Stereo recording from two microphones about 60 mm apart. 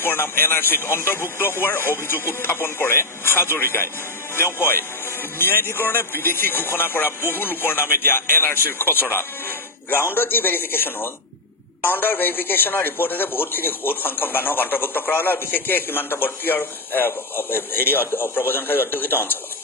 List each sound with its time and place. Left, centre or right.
0.0 s a man's voice: left
5.4 s a man's voice: left